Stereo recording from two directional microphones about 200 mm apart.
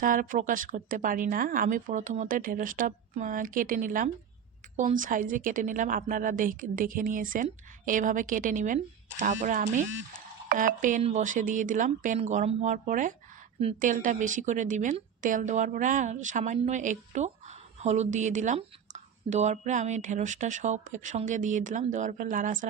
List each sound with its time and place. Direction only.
0.0 s a woman's voice: 45° right (ahead or behind)